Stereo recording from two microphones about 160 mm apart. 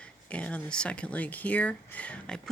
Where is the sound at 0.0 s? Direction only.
5° left (ahead or behind).